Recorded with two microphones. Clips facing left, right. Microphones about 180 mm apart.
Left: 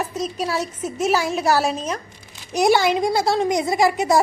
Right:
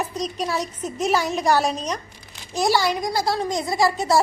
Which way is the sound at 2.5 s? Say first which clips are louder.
Left 4 dB; 20° left (ahead or behind).